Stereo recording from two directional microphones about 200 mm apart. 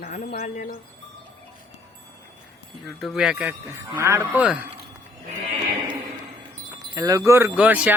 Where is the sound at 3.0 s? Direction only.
Centre (ahead or behind).